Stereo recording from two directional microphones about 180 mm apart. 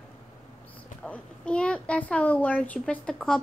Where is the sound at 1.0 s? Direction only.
5° left (ahead or behind).